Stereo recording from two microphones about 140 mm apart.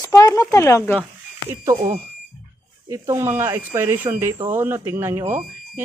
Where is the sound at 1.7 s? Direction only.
60° right (ahead or behind).